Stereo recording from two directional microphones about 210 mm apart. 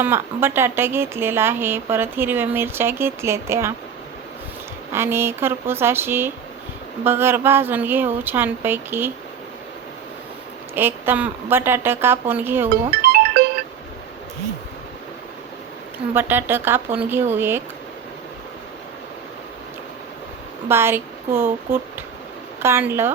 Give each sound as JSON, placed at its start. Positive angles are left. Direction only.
{"t": 0.0, "sound": "a woman's voice", "side_deg": -10}
{"t": 4.9, "sound": "a woman's voice", "side_deg": -10}
{"t": 10.8, "sound": "a woman's voice", "side_deg": -10}
{"t": 13.0, "sound": "music", "side_deg": -45}
{"t": 16.1, "sound": "a woman's voice", "side_deg": -10}
{"t": 20.7, "sound": "a woman's voice", "side_deg": -10}